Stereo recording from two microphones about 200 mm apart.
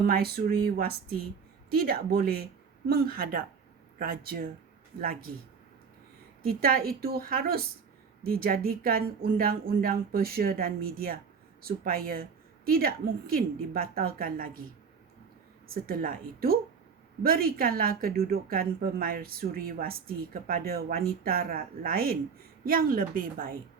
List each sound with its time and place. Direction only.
0.1 s a woman's voice: 50° right (ahead or behind)
6.4 s a woman's voice: 50° right (ahead or behind)
15.7 s a woman's voice: 45° right (ahead or behind)